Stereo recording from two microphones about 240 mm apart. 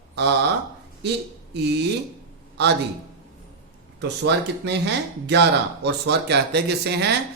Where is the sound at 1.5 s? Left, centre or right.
Right.